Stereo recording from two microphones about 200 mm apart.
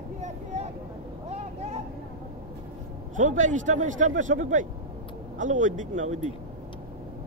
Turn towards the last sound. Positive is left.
turn(degrees=-35)  # may be behind; listen again after turning